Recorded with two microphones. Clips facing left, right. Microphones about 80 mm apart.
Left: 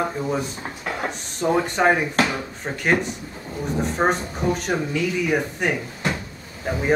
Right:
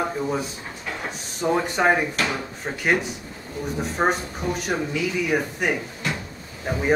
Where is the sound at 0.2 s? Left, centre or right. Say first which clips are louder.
Left 1 dB; centre.